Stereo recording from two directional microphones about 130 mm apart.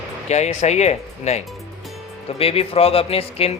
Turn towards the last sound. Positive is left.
turn(degrees=50)  # may be behind; listen again after turning